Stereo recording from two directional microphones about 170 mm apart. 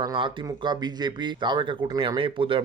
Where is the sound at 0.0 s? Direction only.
25° right (ahead or behind).